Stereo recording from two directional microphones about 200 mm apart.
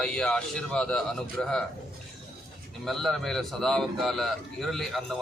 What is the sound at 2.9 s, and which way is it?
A man's voice, centre (ahead or behind).